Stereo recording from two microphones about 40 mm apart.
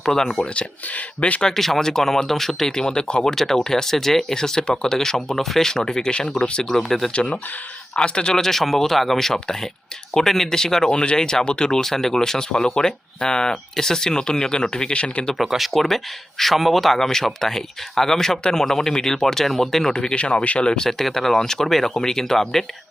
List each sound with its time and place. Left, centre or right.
0.0 s speech: centre
0.4 s speech: left
1.4 s speech: centre; by 6.6 s left
6.6 s speech: centre
7.1 s speech: left
8.4 s speech: centre; by 11.8 s left
11.8 s speech: centre
14.9 s speech: left
15.4 s speech: centre
20.0 s speech: left
20.8 s speech: centre